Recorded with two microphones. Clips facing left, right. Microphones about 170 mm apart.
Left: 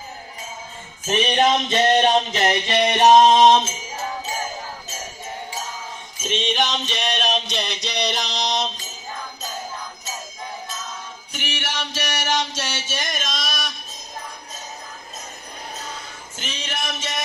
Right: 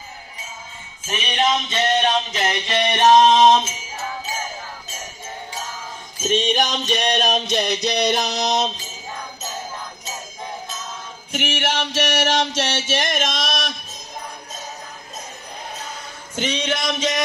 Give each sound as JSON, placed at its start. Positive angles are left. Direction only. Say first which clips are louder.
{"t": 1.0, "sound": "music", "louder": "left 3 dB", "side_deg": 40}
{"t": 2.7, "sound": "music", "louder": "even", "side_deg": 15}
{"t": 6.2, "sound": "music", "louder": "right 3 dB", "side_deg": -40}
{"t": 11.3, "sound": "music", "louder": "right 7 dB", "side_deg": -60}
{"t": 12.7, "sound": "a sound", "louder": "right 6 dB", "side_deg": -60}
{"t": 16.3, "sound": "music", "louder": "right 8 dB", "side_deg": -75}